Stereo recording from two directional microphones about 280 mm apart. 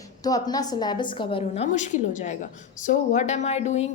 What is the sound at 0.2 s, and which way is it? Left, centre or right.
A woman's voice, centre.